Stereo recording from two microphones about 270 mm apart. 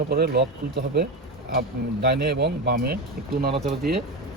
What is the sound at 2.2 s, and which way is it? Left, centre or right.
Speech, right.